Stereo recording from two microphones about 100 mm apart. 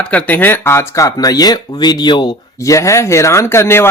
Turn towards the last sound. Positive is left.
turn(degrees=25)  # may be behind; listen again after turning